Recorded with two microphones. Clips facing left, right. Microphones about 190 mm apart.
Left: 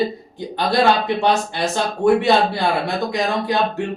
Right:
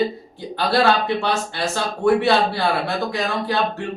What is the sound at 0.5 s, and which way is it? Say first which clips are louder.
Speech: left 1 dB; 15° left (ahead or behind).